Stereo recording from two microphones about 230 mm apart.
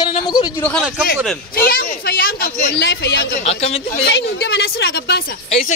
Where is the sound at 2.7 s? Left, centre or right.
Left.